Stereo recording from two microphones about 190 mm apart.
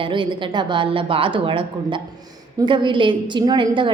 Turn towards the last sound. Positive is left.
turn(degrees=-25)  # may be behind; listen again after turning